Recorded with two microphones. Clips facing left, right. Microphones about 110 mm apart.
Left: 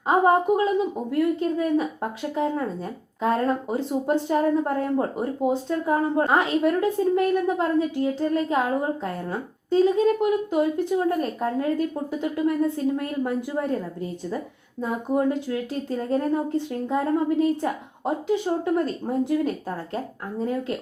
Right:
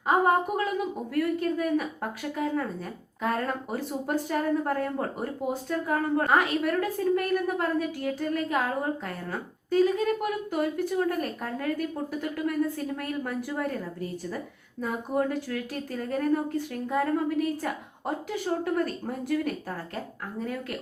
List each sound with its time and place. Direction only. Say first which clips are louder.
0.1 s speech: left 4 dB; 25° left (ahead or behind)